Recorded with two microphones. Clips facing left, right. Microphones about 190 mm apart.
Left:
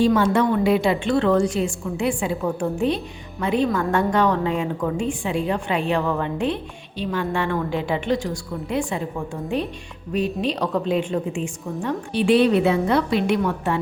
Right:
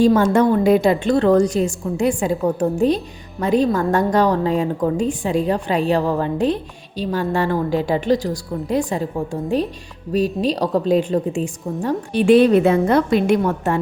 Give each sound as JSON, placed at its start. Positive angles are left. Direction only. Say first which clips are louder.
{"t": 0.0, "sound": "a woman's voice", "louder": "right 4 dB", "side_deg": -45}